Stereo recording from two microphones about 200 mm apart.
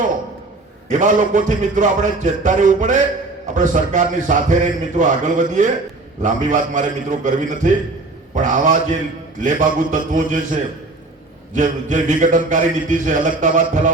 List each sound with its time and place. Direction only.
0.9 s a man's voice: 40° right (ahead or behind)